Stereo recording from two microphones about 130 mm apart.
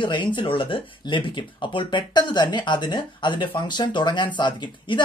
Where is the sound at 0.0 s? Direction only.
35° left (ahead or behind).